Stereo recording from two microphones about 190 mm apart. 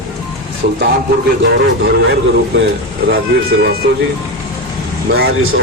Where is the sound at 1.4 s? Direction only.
60° right (ahead or behind).